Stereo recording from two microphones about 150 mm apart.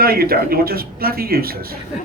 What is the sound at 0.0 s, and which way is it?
A man's voice, 85° right.